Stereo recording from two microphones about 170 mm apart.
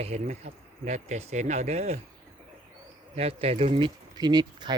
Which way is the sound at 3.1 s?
35° right (ahead or behind).